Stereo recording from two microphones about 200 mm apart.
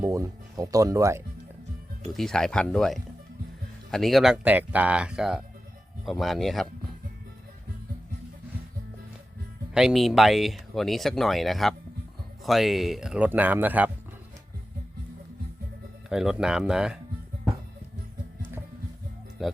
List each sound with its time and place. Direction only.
0.0 s speech: 15° right (ahead or behind)
2.1 s speech: centre (ahead or behind)
9.7 s speech: centre (ahead or behind)
16.0 s speech: 5° right (ahead or behind)
19.4 s speech: centre (ahead or behind)